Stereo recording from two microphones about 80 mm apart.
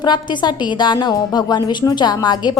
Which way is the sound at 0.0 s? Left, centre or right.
Left.